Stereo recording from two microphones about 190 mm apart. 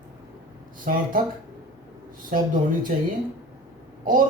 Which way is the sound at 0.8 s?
45° right (ahead or behind).